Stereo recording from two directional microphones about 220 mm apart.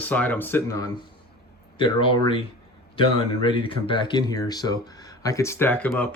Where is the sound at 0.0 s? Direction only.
5° left (ahead or behind).